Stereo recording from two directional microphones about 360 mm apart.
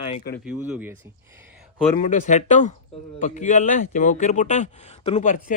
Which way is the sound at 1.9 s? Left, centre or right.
Left.